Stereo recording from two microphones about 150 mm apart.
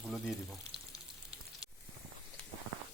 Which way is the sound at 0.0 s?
5° right (ahead or behind).